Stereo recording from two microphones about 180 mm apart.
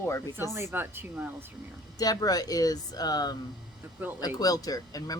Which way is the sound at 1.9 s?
20° left (ahead or behind).